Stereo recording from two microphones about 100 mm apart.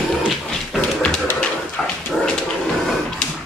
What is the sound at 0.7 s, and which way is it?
Dog, 10° left (ahead or behind).